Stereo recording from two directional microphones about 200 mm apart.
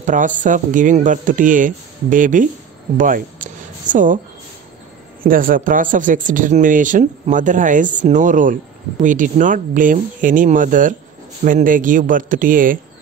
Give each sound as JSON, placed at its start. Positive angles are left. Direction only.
{"t": 0.0, "sound": "speech", "side_deg": -40}
{"t": 5.2, "sound": "speech", "side_deg": -45}